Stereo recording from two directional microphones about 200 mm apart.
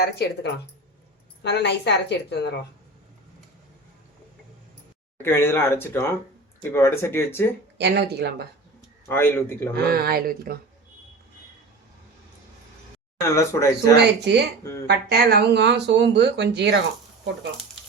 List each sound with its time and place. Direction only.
0.2 s a woman's voice: 55° left (ahead or behind)
1.4 s a woman's voice: 60° left (ahead or behind)
5.1 s speech: 10° left (ahead or behind)
7.8 s speech: 55° right (ahead or behind)
9.0 s speech: 10° left (ahead or behind)
9.7 s speech: 50° right (ahead or behind)
13.2 s speech: 15° left (ahead or behind)
13.9 s speech: 55° right (ahead or behind)
14.6 s speech: 15° left (ahead or behind)
14.8 s speech: 55° right (ahead or behind)